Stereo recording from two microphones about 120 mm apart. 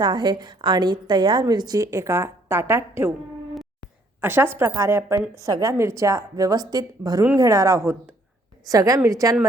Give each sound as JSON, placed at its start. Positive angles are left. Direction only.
{"t": 0.0, "sound": "a woman's voice", "side_deg": -40}
{"t": 4.2, "sound": "a woman's voice", "side_deg": -20}